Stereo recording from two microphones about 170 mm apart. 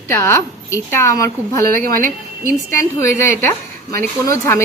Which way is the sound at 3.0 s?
15° left (ahead or behind).